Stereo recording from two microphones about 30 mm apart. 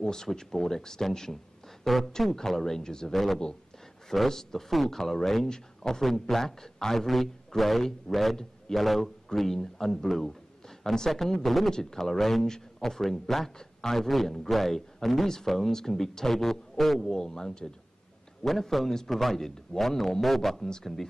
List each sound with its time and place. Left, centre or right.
0.0 s speech: centre
3.1 s a man's voice: centre
8.4 s a man's voice: centre
12.1 s speech: centre
13.6 s a man's voice: left
13.9 s a man's voice: centre
17.2 s speech: left
18.4 s a man's voice: centre
20.6 s speech: centre